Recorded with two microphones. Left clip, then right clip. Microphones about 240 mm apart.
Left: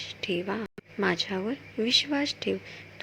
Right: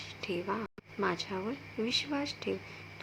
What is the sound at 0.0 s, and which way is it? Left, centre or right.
A woman's voice, centre.